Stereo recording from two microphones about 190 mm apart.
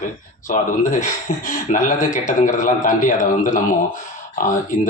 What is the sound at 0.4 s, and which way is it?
A man's voice, 40° left (ahead or behind).